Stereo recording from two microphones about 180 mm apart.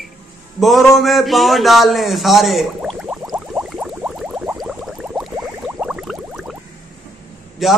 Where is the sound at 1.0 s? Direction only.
Centre (ahead or behind).